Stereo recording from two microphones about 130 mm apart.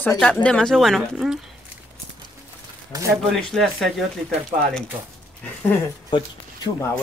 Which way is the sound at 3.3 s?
5° left (ahead or behind).